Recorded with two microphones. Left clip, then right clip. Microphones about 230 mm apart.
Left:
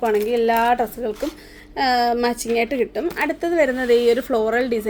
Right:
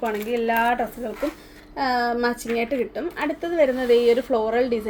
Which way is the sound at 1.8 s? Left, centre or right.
Left.